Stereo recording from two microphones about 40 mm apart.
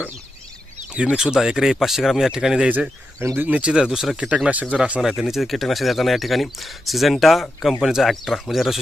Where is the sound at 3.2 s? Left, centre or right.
Right.